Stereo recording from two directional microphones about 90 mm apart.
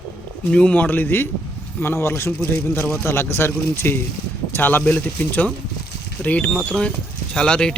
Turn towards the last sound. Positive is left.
turn(degrees=10)  # may be behind; listen again after turning